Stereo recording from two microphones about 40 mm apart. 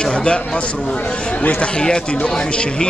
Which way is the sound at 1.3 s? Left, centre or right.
Left.